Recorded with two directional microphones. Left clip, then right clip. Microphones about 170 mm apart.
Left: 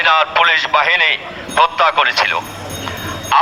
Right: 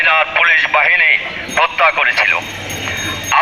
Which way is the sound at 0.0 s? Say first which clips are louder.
Even; 50° left (ahead or behind).